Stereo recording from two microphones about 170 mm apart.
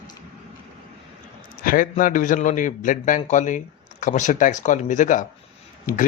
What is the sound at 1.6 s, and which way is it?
Speech, 55° left (ahead or behind).